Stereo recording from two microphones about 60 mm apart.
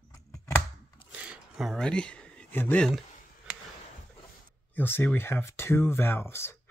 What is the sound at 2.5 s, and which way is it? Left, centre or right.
Speech, left.